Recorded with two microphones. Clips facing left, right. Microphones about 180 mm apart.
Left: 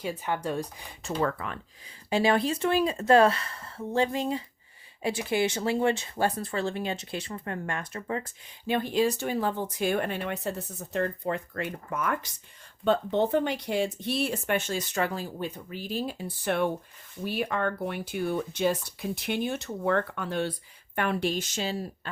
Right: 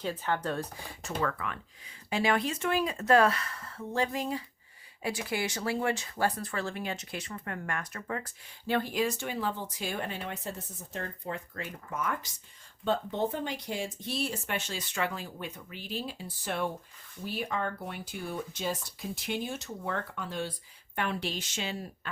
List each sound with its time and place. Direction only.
0.0 s speech: 10° left (ahead or behind)
1.0 s speech: 35° left (ahead or behind)
9.2 s speech: 45° left (ahead or behind); by 20.5 s 65° left (ahead or behind)
20.9 s a woman's voice: 55° left (ahead or behind); by 22.1 s 35° left (ahead or behind)